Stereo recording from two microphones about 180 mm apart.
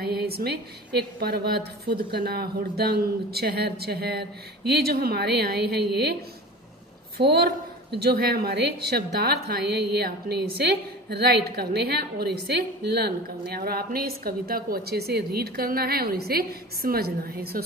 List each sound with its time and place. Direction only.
0.0 s a woman's voice: 60° right (ahead or behind)
7.2 s a woman's voice: 60° right (ahead or behind)